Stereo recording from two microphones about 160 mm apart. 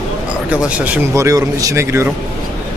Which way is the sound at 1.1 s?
20° right (ahead or behind).